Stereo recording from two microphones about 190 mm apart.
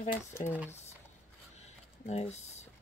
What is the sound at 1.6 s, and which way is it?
Typing, 35° left (ahead or behind).